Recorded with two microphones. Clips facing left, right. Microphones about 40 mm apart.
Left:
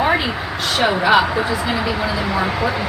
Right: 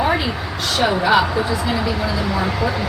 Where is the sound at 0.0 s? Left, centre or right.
Centre.